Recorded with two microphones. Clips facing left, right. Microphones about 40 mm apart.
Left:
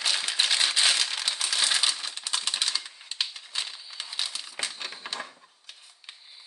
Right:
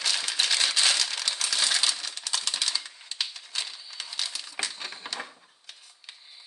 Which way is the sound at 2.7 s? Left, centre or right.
Centre.